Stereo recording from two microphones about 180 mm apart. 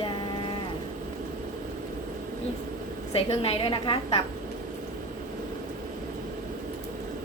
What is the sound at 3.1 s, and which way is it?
A woman's voice, 30° left (ahead or behind).